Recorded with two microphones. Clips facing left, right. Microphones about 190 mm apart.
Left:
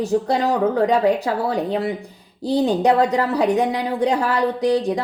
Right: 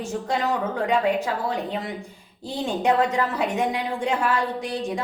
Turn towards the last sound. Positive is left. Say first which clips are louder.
# left 8 dB
turn(degrees=35)  # may be behind; listen again after turning